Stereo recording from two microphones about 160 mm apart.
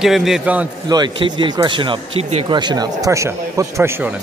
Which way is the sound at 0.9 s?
25° right (ahead or behind).